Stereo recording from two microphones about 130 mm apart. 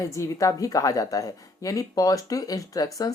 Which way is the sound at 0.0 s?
25° left (ahead or behind).